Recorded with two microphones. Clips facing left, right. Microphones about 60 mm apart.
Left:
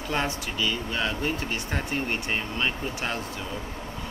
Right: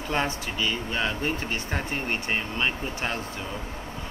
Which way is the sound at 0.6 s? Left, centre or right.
Right.